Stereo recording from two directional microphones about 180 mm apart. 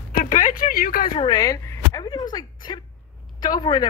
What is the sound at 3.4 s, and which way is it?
Speech, 25° left (ahead or behind).